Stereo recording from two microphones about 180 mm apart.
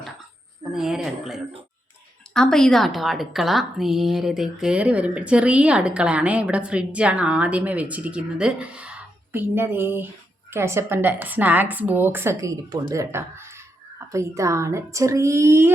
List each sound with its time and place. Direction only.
0.7 s a woman's voice: centre (ahead or behind)